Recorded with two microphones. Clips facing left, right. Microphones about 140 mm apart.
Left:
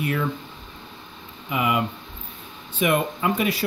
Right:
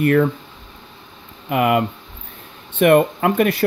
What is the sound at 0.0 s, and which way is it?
Speech, 55° right (ahead or behind).